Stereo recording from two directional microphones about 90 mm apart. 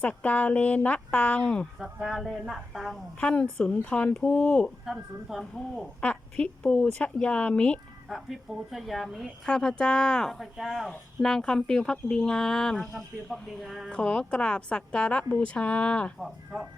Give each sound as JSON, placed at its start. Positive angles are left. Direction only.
{"t": 0.0, "sound": "speech", "side_deg": 15}
{"t": 1.8, "sound": "speech", "side_deg": -5}
{"t": 3.2, "sound": "speech", "side_deg": 10}
{"t": 4.9, "sound": "speech", "side_deg": 0}
{"t": 6.0, "sound": "speech", "side_deg": 15}
{"t": 8.1, "sound": "speech", "side_deg": 0}
{"t": 13.9, "sound": "speech", "side_deg": 10}
{"t": 16.2, "sound": "speech", "side_deg": -5}